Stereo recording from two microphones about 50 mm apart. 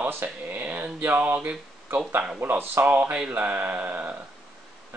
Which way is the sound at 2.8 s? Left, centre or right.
Right.